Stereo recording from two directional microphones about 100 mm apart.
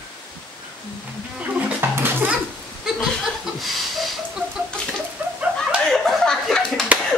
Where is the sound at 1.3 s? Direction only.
15° right (ahead or behind).